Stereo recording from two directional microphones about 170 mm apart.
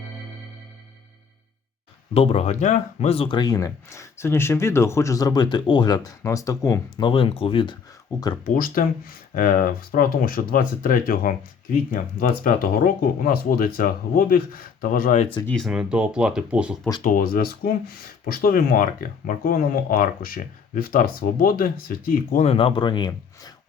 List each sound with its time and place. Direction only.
2.1 s speech: 35° left (ahead or behind)
8.4 s speech: 55° left (ahead or behind)
15.4 s speech: centre (ahead or behind)
17.0 s speech: 55° left (ahead or behind)
22.4 s speech: 30° left (ahead or behind)